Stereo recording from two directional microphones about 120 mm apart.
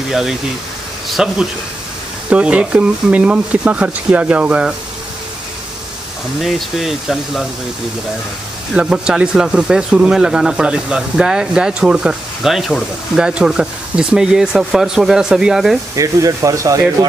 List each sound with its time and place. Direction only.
0.1 s speech: 5° right (ahead or behind)
6.4 s speech: 5° right (ahead or behind)
8.7 s speech: 10° right (ahead or behind)
16.0 s speech: 25° right (ahead or behind)